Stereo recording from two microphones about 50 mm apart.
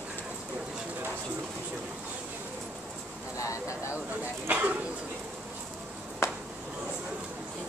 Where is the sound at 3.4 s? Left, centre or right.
Left.